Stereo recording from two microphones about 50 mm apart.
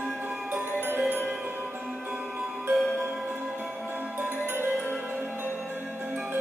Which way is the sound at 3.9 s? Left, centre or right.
Right.